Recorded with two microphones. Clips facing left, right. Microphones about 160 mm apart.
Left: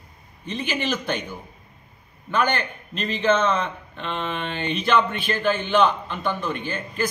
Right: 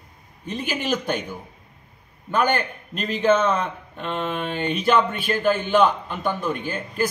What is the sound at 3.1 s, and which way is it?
Mantra, 10° right (ahead or behind).